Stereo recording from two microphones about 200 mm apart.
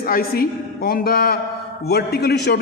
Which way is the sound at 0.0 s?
50° left (ahead or behind).